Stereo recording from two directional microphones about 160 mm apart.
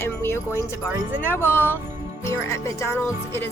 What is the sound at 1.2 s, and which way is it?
Speech, 15° left (ahead or behind).